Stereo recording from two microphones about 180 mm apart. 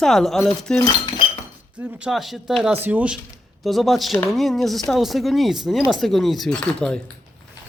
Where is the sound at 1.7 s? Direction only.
10° right (ahead or behind).